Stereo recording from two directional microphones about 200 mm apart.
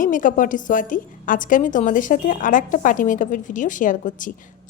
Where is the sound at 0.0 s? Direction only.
40° left (ahead or behind).